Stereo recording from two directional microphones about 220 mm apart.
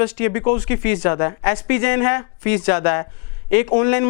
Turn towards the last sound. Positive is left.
turn(degrees=20)  # may be behind; listen again after turning